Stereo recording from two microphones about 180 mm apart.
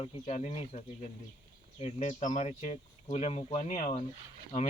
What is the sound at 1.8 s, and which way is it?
Speech, 40° left (ahead or behind).